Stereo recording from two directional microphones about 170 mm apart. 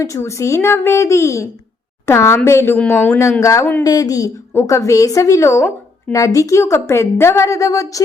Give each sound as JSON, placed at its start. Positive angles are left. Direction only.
{"t": 0.0, "sound": "a woman's voice", "side_deg": 15}